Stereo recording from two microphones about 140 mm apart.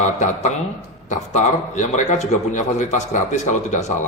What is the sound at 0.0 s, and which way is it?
A man's voice, 60° left (ahead or behind).